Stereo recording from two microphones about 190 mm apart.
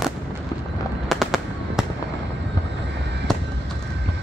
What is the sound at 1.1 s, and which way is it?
Fireworks, centre (ahead or behind).